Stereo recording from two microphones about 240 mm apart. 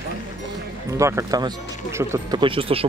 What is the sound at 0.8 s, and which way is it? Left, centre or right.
Speech, centre.